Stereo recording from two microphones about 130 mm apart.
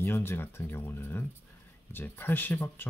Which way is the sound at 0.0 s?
20° left (ahead or behind).